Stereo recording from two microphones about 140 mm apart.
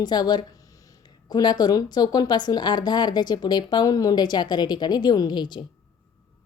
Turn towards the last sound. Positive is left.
turn(degrees=30)  # may be behind; listen again after turning